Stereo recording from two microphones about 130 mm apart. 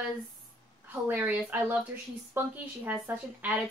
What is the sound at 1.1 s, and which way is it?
A woman's voice, 15° right (ahead or behind).